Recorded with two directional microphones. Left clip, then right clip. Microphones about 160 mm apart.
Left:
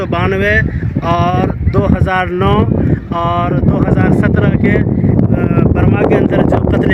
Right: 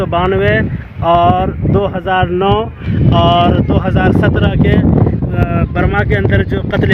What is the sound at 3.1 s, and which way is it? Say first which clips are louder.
Speech: right 6 dB; 40° right (ahead or behind).